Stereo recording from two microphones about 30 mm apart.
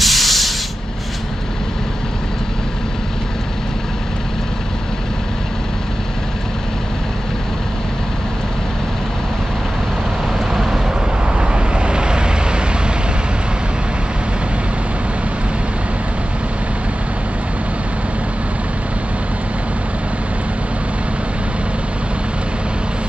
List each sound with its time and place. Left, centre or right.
0.0 s spray: centre
10.5 s vehicle: centre
11.3 s vehicle: right